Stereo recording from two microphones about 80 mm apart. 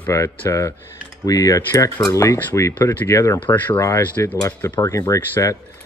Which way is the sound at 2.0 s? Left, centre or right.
Left.